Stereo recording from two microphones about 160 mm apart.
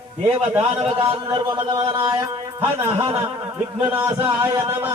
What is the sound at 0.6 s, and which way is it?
Speech, 40° right (ahead or behind).